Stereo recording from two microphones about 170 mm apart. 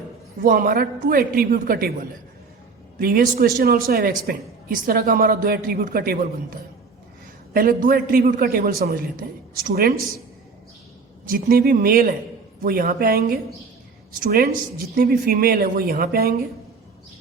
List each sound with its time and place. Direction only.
0.4 s a woman's voice: 55° right (ahead or behind)
11.3 s a woman's voice: 60° right (ahead or behind)